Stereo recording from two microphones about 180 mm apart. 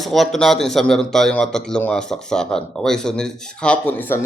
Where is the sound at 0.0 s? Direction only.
Centre (ahead or behind).